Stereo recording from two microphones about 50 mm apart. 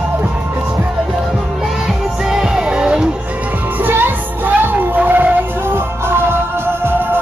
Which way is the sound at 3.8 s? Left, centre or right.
Right.